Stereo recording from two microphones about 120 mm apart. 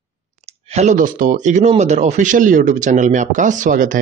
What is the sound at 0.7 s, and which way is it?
Speech, 75° right (ahead or behind).